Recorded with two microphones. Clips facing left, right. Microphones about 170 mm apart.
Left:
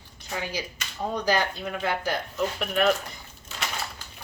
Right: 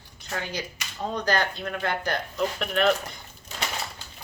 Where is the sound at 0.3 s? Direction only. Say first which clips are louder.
Even; 5° left (ahead or behind).